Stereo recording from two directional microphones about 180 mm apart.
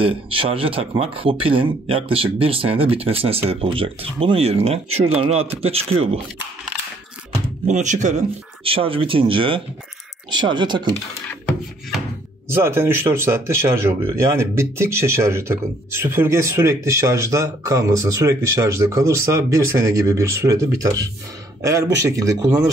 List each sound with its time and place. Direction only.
0.0 s speech: 30° right (ahead or behind)
7.6 s speech: 40° right (ahead or behind); by 11.0 s 25° right (ahead or behind)
12.4 s speech: 15° right (ahead or behind)